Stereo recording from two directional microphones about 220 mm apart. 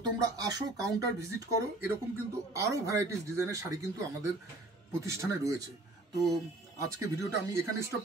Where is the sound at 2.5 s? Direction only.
15° right (ahead or behind).